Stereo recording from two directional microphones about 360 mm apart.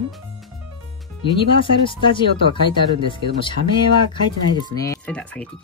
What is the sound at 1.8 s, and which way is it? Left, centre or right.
Speech, centre.